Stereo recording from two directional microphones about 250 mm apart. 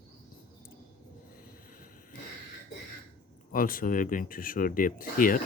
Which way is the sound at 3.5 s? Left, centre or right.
Left.